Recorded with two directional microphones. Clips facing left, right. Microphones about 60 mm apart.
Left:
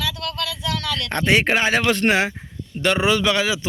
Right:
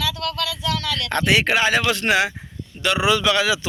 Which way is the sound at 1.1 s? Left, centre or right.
Left.